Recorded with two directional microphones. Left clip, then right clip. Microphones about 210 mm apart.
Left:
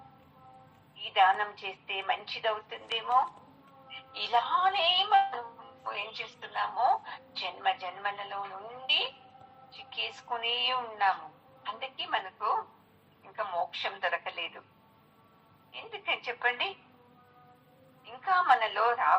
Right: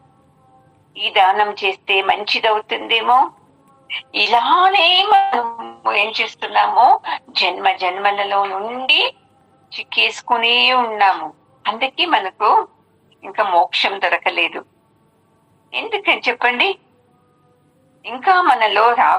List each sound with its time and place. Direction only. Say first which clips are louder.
0.9 s music: right 12 dB; 50° right (ahead or behind)
15.7 s music: right 17 dB; 50° right (ahead or behind)
18.0 s music: right 14 dB; 50° right (ahead or behind)